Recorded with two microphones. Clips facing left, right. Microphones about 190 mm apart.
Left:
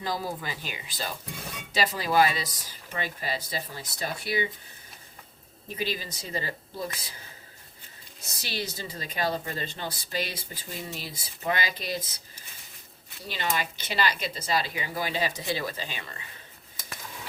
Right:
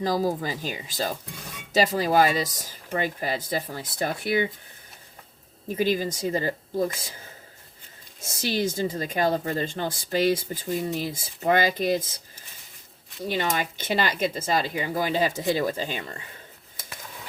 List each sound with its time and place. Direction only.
0.0 s speech: 40° right (ahead or behind)
5.7 s speech: 50° right (ahead or behind)
8.2 s speech: 50° right (ahead or behind)
13.2 s speech: 50° right (ahead or behind)